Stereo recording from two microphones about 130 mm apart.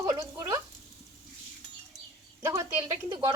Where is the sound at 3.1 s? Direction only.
35° right (ahead or behind).